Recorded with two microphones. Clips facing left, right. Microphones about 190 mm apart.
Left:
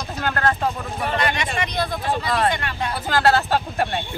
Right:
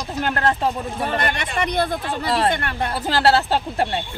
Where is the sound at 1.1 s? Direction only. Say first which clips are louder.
Left 2 dB; 55° right (ahead or behind).